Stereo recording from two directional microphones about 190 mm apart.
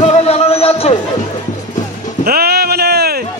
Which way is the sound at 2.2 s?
55° right (ahead or behind).